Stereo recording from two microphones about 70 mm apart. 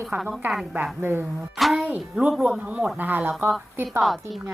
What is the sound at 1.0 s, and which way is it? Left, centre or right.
Speech, right.